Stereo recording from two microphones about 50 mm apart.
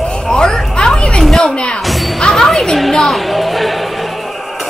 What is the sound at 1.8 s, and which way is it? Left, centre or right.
Music, centre.